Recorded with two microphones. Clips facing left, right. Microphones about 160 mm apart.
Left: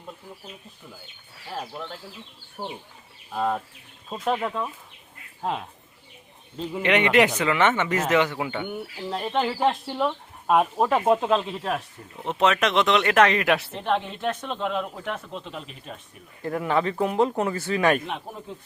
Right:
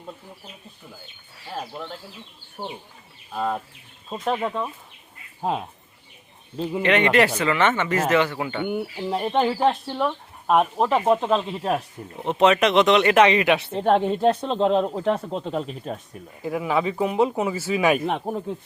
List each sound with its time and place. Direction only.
1.5 s speech: centre (ahead or behind)
2.6 s speech: 15° right (ahead or behind)
3.3 s speech: centre (ahead or behind)
6.8 s speech: 15° left (ahead or behind)
8.6 s speech: 5° right (ahead or behind)
9.8 s speech: 5° left (ahead or behind)
12.0 s speech: 20° right (ahead or behind)
12.3 s speech: centre (ahead or behind)
13.7 s speech: 40° right (ahead or behind)
16.4 s speech: 5° right (ahead or behind)
18.0 s speech: 50° right (ahead or behind)